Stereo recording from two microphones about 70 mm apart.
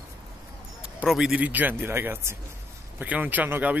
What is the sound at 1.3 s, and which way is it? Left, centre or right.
Speech, right.